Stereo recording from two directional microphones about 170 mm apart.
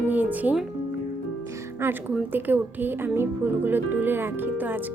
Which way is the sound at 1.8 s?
10° right (ahead or behind).